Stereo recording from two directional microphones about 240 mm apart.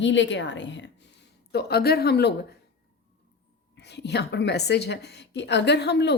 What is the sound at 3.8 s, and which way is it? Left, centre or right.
A woman's voice, left.